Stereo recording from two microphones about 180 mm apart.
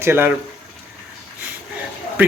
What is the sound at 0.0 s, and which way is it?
Speech, 10° right (ahead or behind).